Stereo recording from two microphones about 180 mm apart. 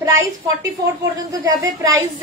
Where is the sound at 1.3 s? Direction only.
20° right (ahead or behind).